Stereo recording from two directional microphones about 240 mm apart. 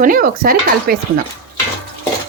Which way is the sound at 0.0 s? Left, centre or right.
Right.